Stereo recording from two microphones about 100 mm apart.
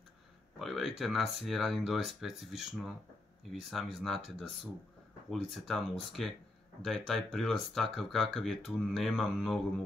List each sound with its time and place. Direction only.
0.6 s speech: centre (ahead or behind)